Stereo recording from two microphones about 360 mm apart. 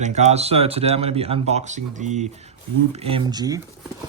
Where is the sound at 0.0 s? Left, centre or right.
Centre.